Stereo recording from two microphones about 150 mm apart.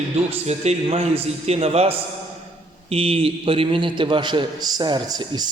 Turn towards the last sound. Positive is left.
turn(degrees=-30)  # may be behind; listen again after turning